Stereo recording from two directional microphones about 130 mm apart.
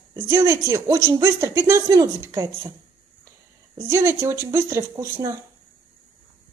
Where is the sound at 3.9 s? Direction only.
20° right (ahead or behind).